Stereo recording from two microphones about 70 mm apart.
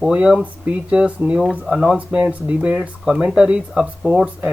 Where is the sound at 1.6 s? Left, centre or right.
Centre.